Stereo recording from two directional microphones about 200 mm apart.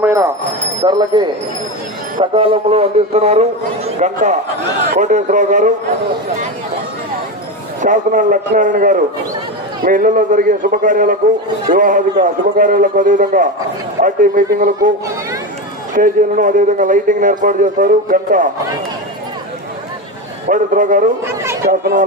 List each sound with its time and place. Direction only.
0.0 s jingle bell: 15° right (ahead or behind)
0.9 s speech: 20° right (ahead or behind)
2.3 s a man's voice: 30° right (ahead or behind)
7.8 s a man's voice: 40° right (ahead or behind)
16.0 s a man's voice: 40° right (ahead or behind)
20.5 s a man's voice: 40° right (ahead or behind)